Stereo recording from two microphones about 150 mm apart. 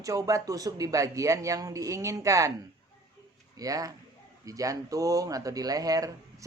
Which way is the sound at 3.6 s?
25° right (ahead or behind).